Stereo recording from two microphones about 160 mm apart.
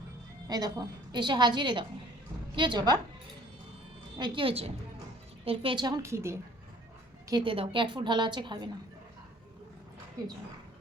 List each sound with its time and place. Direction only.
0.4 s a woman's voice: 25° right (ahead or behind)
4.2 s a woman's voice: 35° right (ahead or behind); by 6.4 s 15° right (ahead or behind)
7.3 s a woman's voice: 30° right (ahead or behind)